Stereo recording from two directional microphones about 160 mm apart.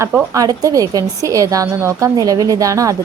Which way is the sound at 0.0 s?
20° right (ahead or behind).